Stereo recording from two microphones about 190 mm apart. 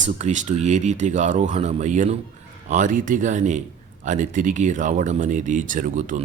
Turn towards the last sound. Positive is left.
turn(degrees=-40)  # may be behind; listen again after turning